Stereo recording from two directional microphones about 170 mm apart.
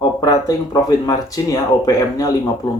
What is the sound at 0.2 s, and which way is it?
Speech, 20° left (ahead or behind).